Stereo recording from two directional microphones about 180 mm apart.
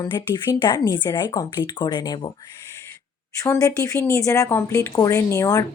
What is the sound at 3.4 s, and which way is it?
Speech, 20° left (ahead or behind).